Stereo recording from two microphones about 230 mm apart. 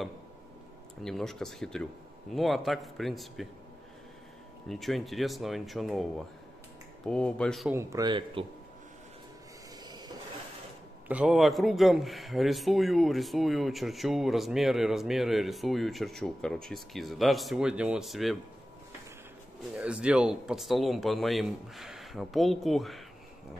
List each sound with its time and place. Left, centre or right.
1.0 s a man's voice: centre
4.6 s a man's voice: centre
7.7 s speech: centre
9.8 s vehicle: centre
11.1 s a man's voice: centre
19.7 s a man's voice: centre